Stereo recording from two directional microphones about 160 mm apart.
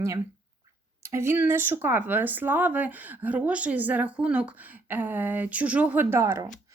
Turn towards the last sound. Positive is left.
turn(degrees=-15)  # may be behind; listen again after turning